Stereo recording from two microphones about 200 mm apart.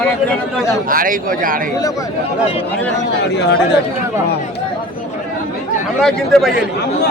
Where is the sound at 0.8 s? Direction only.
45° right (ahead or behind).